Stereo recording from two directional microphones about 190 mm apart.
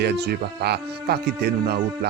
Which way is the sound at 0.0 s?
60° right (ahead or behind).